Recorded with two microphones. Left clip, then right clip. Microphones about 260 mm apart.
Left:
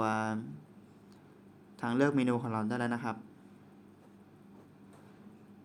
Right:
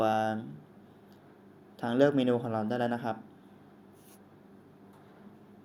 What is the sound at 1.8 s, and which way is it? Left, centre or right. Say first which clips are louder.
Speech: right 4 dB; centre.